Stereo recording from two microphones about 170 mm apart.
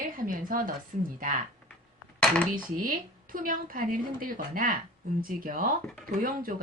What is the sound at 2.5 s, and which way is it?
Speech, 55° right (ahead or behind).